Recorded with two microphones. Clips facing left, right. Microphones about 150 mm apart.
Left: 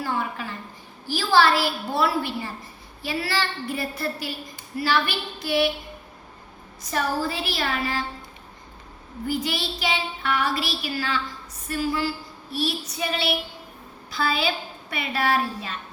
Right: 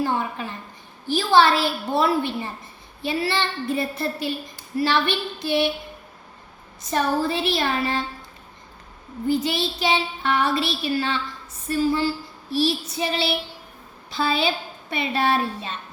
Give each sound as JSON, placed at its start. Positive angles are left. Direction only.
{"t": 0.0, "sound": "a woman's voice", "side_deg": -20}
{"t": 1.1, "sound": "child singing", "side_deg": -20}
{"t": 6.8, "sound": "child singing", "side_deg": -25}
{"t": 9.2, "sound": "child singing", "side_deg": -25}